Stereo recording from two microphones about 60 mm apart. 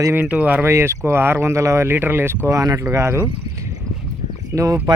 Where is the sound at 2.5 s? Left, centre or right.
Right.